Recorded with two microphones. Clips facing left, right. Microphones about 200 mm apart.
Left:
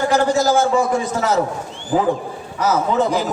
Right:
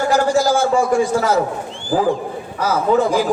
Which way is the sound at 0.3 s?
10° right (ahead or behind).